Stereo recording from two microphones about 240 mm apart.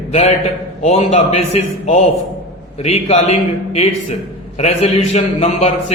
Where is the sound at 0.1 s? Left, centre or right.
Left.